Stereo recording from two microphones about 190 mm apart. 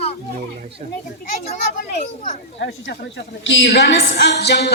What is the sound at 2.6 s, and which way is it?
A woman's voice, 65° left (ahead or behind).